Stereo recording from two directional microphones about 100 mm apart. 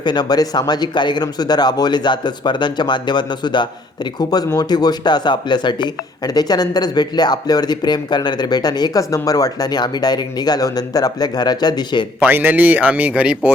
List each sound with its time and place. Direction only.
0.0 s speech: 45° left (ahead or behind)
12.2 s speech: 20° right (ahead or behind)